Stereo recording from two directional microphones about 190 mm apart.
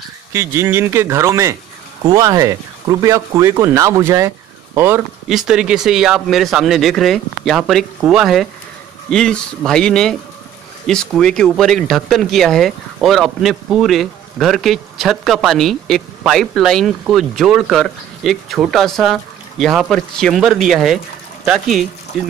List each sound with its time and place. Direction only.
0.3 s speech: 15° right (ahead or behind)